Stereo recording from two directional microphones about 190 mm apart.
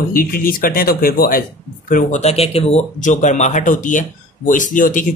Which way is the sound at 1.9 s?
35° left (ahead or behind).